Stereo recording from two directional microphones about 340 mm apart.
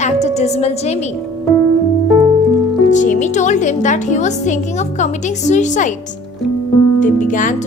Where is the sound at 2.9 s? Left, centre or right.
Left.